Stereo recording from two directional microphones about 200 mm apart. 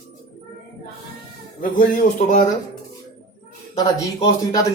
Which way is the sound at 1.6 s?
40° left (ahead or behind).